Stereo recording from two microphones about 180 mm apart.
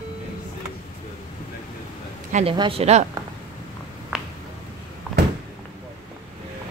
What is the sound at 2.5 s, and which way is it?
Speech, 30° right (ahead or behind).